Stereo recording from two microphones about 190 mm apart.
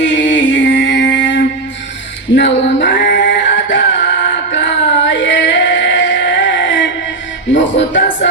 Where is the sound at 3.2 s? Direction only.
70° left (ahead or behind).